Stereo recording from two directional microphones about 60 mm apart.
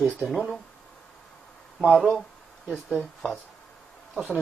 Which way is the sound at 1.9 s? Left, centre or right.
Left.